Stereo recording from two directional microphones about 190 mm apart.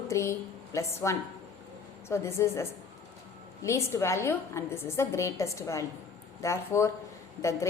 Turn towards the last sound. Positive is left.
turn(degrees=15)  # may be behind; listen again after turning